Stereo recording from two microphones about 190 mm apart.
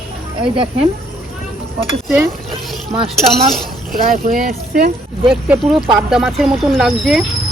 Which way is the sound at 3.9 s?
45° right (ahead or behind).